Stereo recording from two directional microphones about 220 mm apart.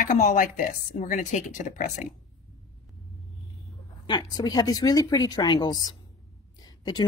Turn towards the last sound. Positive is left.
turn(degrees=20)  # may be behind; listen again after turning